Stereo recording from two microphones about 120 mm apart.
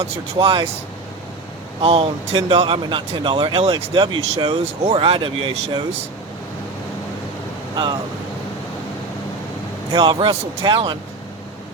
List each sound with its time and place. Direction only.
0.3 s speech: 45° right (ahead or behind)
1.8 s speech: 55° right (ahead or behind)
9.9 s speech: 40° right (ahead or behind)